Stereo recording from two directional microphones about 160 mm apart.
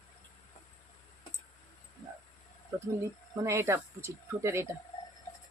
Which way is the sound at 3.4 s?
15° right (ahead or behind).